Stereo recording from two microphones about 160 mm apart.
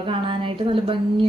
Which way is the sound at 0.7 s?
30° right (ahead or behind).